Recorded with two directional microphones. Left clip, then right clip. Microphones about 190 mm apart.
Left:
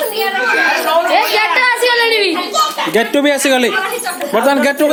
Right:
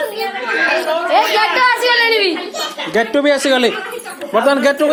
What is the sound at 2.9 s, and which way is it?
Speech, 25° left (ahead or behind).